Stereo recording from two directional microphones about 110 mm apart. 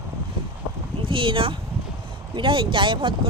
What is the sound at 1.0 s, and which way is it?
Speech, 50° right (ahead or behind).